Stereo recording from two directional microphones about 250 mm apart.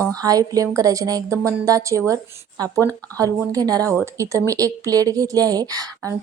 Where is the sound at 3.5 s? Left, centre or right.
Centre.